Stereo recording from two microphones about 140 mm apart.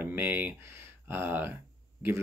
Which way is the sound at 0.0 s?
15° right (ahead or behind).